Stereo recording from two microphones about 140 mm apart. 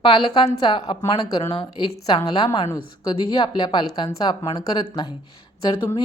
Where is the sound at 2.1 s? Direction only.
30° left (ahead or behind).